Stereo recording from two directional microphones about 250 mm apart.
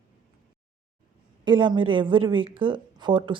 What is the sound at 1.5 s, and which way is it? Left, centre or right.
Speech, centre.